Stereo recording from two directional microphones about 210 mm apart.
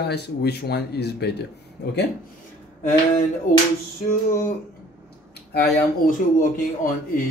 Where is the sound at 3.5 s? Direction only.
40° left (ahead or behind).